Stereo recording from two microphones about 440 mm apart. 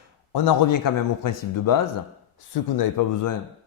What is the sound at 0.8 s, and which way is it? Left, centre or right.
Speech, left.